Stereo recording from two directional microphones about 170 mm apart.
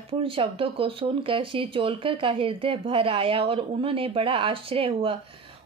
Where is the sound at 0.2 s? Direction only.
30° right (ahead or behind).